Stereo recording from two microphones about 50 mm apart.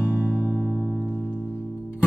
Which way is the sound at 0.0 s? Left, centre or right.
Left.